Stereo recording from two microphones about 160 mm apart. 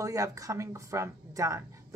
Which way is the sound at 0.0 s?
20° right (ahead or behind).